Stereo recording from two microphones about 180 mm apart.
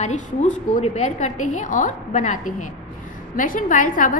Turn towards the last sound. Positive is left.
turn(degrees=50)  # may be behind; listen again after turning